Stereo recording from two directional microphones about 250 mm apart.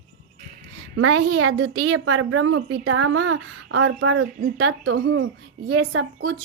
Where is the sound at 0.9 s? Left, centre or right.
Right.